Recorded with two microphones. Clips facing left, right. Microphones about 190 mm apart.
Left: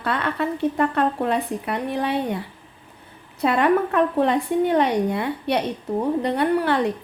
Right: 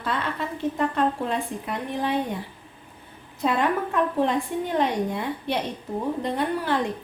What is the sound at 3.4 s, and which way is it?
A woman's voice, 70° left (ahead or behind).